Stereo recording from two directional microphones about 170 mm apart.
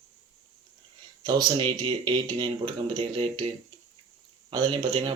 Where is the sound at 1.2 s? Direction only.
25° right (ahead or behind).